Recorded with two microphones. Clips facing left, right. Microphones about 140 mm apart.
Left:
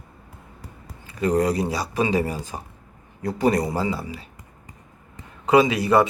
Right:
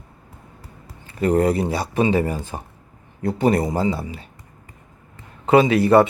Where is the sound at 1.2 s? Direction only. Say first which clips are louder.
Right 3 dB; 30° right (ahead or behind).